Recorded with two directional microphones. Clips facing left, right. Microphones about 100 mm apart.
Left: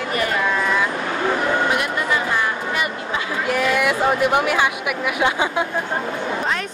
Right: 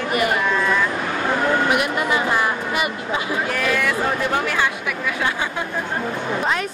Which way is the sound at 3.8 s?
15° left (ahead or behind).